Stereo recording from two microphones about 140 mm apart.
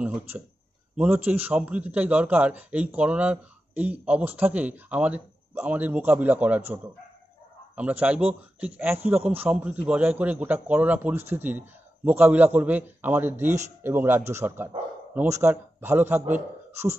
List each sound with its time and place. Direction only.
0.9 s a man's voice: 10° right (ahead or behind)